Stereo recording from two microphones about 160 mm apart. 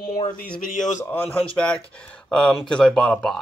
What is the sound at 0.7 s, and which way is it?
Speech, 50° left (ahead or behind).